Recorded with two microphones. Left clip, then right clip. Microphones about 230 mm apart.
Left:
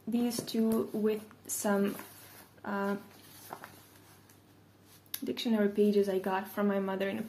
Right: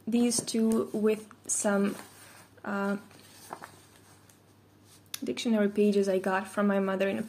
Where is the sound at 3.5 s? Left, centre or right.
Centre.